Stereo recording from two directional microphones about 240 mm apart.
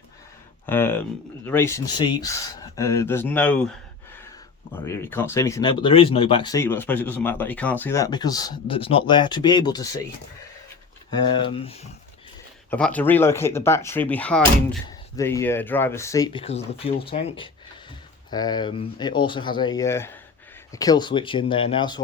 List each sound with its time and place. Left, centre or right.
0.7 s speech: centre
4.9 s speech: centre
11.3 s speech: left
12.7 s speech: centre